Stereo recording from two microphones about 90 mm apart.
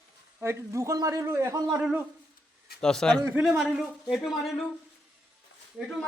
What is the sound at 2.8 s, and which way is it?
Speech, 5° left (ahead or behind).